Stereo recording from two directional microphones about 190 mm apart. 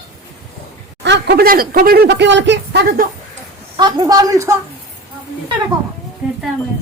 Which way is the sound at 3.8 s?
25° right (ahead or behind).